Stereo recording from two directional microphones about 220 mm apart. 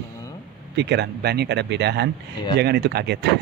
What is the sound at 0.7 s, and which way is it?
Speech, 50° right (ahead or behind).